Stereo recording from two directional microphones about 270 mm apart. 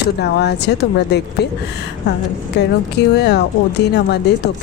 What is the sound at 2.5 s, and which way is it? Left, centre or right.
Speech, left.